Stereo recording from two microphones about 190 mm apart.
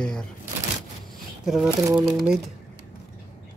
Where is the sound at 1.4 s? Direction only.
Centre (ahead or behind).